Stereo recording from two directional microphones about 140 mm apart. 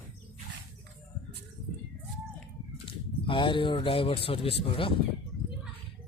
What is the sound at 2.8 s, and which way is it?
Speech, 35° left (ahead or behind).